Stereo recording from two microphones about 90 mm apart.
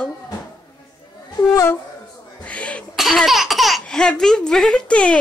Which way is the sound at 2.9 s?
Centre (ahead or behind).